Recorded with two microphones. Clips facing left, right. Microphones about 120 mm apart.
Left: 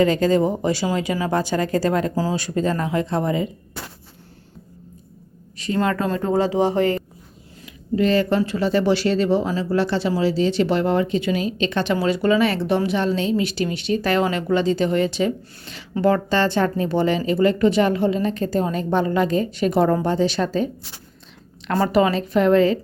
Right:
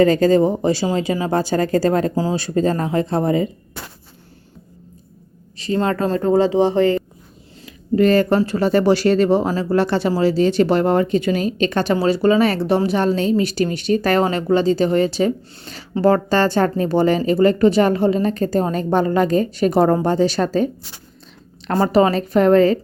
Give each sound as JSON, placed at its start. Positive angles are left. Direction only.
{"t": 0.0, "sound": "speech", "side_deg": -40}
{"t": 5.5, "sound": "speech", "side_deg": -30}
{"t": 7.9, "sound": "speech", "side_deg": -50}
{"t": 21.7, "sound": "speech", "side_deg": -35}